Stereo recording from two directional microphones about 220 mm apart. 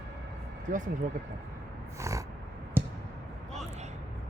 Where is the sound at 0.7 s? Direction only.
35° right (ahead or behind).